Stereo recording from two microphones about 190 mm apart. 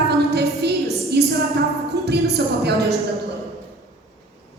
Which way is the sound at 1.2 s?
60° right (ahead or behind).